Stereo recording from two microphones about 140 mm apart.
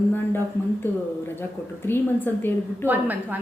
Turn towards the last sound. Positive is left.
turn(degrees=-10)  # may be behind; listen again after turning